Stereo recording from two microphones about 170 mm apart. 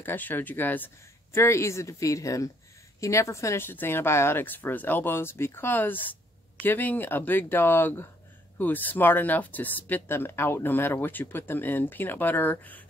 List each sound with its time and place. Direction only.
0.0 s speech: 10° left (ahead or behind)